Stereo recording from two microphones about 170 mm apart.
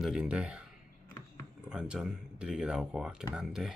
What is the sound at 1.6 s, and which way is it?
Speech, 5° right (ahead or behind).